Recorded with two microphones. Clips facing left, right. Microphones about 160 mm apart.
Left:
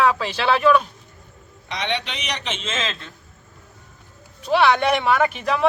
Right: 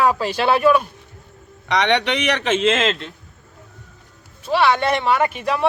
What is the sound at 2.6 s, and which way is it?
Speech, 75° right (ahead or behind).